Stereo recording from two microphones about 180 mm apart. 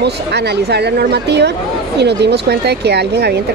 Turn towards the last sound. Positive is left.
turn(degrees=-65)  # may be behind; listen again after turning